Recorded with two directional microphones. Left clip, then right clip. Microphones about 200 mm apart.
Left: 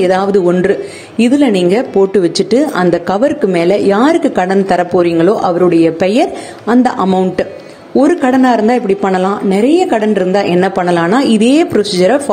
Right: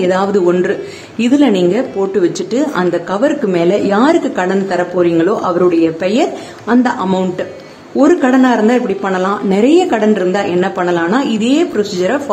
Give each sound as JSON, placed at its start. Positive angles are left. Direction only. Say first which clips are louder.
{"t": 0.0, "sound": "a woman's voice", "louder": "left 2 dB", "side_deg": 20}